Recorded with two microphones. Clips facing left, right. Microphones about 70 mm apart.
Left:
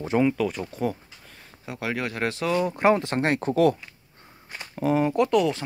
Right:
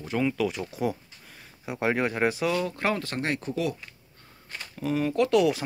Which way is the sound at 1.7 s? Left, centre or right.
Right.